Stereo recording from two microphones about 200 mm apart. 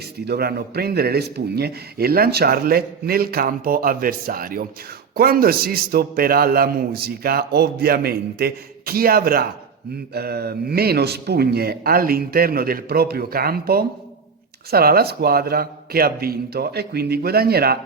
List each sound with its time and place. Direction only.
0.3 s a man's voice: 55° right (ahead or behind)